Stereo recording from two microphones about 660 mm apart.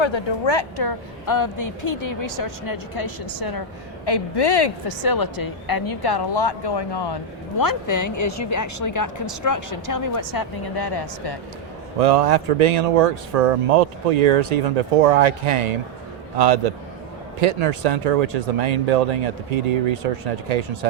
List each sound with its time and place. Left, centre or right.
0.0 s a woman's voice: left
11.9 s speech: right